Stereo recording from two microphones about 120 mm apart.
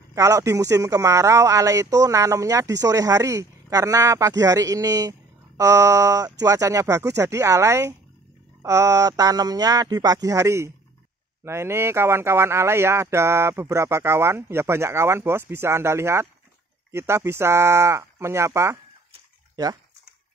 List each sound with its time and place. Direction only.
0.1 s a man's voice: 25° right (ahead or behind)